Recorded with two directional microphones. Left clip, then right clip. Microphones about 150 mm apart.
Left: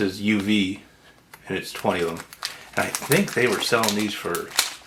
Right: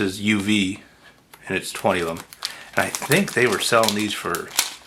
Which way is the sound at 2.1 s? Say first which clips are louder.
Right 1 dB; 5° right (ahead or behind).